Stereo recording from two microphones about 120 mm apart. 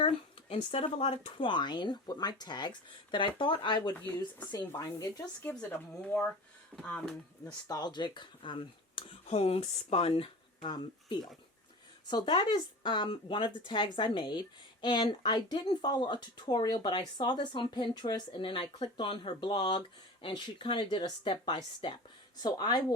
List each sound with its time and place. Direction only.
0.0 s speech: 55° left (ahead or behind)
4.5 s speech: 30° left (ahead or behind)
6.7 s speech: 5° left (ahead or behind)
7.7 s speech: 35° left (ahead or behind)
9.2 s speech: 60° left (ahead or behind); by 23.0 s 35° left (ahead or behind)